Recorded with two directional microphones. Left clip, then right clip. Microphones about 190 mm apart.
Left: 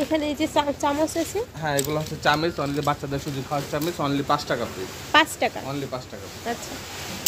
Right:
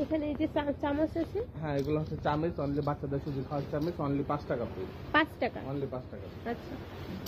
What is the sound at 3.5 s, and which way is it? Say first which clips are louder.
Speech: left 8 dB; 50° left (ahead or behind).